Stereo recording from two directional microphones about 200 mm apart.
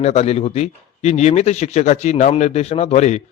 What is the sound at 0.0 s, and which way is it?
Speech, 30° left (ahead or behind).